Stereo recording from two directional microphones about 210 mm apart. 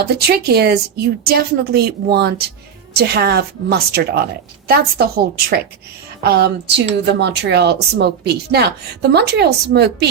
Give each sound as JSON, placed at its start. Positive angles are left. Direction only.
{"t": 0.0, "sound": "a woman's voice", "side_deg": -50}